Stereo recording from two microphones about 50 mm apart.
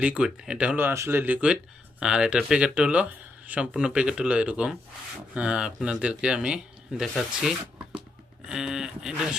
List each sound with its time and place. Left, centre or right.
0.0 s speech: right
0.9 s speech: right
1.2 s speech: right
2.0 s speech: centre
8.4 s speech: centre